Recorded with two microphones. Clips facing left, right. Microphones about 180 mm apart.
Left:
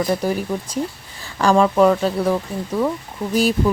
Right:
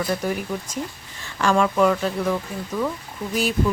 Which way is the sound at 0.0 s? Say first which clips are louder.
Left 4 dB; 35° left (ahead or behind).